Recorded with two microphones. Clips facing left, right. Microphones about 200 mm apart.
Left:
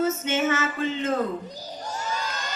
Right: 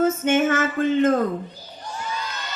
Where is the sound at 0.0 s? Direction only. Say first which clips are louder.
Right 5 dB; 50° right (ahead or behind).